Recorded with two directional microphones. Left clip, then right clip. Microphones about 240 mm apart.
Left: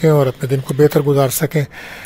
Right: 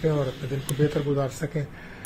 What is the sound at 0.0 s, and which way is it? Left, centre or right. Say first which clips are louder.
Speech: left 12 dB; left.